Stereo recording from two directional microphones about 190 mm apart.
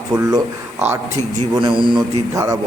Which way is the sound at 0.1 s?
20° right (ahead or behind).